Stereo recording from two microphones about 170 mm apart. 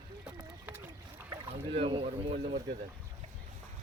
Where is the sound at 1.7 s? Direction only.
30° right (ahead or behind).